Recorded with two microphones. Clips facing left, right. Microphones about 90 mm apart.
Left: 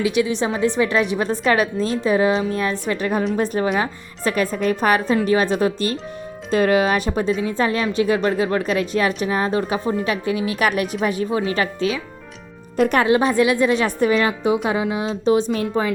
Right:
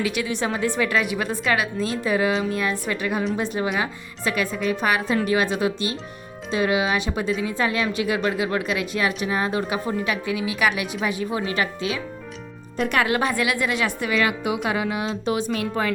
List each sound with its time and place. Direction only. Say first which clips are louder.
0.0 s a woman's voice: left 5 dB; 20° left (ahead or behind)
12.7 s speech: left 7 dB; 45° left (ahead or behind)
13.0 s a woman's voice: left 4 dB; 25° left (ahead or behind)